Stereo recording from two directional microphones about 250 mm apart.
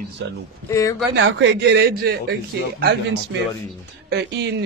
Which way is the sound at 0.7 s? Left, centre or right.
Centre.